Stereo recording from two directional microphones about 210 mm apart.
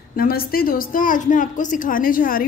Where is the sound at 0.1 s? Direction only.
45° left (ahead or behind).